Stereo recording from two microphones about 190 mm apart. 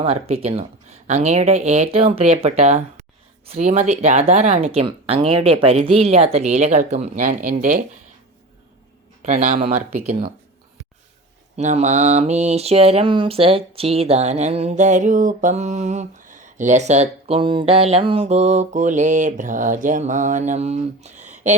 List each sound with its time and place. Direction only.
0.0 s mantra: 35° right (ahead or behind)
2.3 s speech: 35° right (ahead or behind)
3.5 s mantra: 35° right (ahead or behind)
9.2 s speech: 45° right (ahead or behind)
11.5 s mantra: 40° right (ahead or behind)